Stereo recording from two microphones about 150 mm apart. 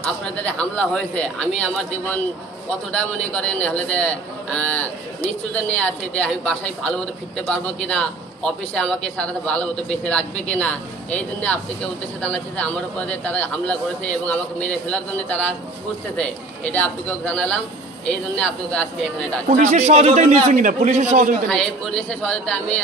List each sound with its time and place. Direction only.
0.0 s a man's voice: 10° left (ahead or behind)
19.5 s a man's voice: 55° right (ahead or behind)
21.5 s a man's voice: 5° left (ahead or behind)